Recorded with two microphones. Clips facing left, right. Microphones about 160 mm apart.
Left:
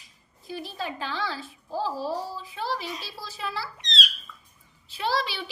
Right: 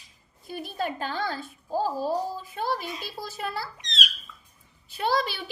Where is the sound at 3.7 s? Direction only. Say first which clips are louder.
Left 1 dB; 20° right (ahead or behind).